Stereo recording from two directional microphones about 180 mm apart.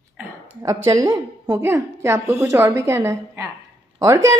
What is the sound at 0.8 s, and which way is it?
A woman's voice, 20° right (ahead or behind).